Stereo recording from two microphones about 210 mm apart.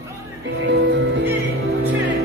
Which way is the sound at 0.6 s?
55° right (ahead or behind).